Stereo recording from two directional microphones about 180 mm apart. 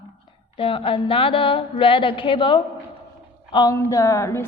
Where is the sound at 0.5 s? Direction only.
30° left (ahead or behind).